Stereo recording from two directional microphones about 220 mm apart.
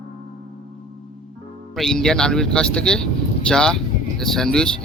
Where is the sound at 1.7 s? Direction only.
Centre (ahead or behind).